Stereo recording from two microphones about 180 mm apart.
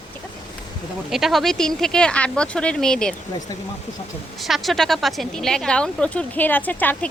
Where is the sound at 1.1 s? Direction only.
Centre (ahead or behind).